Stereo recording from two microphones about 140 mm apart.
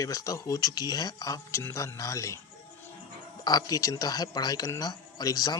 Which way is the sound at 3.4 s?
25° left (ahead or behind).